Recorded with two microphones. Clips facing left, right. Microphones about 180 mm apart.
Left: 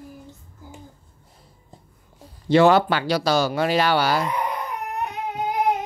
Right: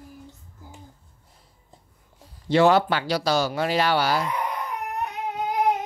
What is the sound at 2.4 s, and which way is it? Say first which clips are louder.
Speech: left 2 dB; 70° left (ahead or behind).